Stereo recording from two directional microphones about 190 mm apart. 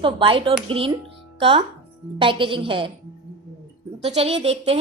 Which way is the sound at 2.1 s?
25° right (ahead or behind).